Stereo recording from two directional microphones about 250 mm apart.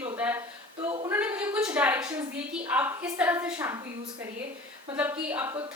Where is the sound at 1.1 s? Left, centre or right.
Centre.